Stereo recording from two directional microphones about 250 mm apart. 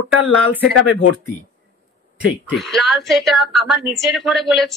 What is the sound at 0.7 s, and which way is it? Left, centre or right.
Speech, left.